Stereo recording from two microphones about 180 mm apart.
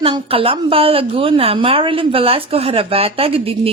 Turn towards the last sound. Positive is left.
turn(degrees=-30)  # may be behind; listen again after turning